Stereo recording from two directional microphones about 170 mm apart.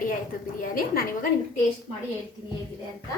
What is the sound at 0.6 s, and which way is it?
Speech, 55° left (ahead or behind).